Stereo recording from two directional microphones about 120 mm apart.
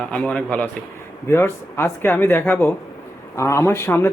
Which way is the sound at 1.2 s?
20° left (ahead or behind).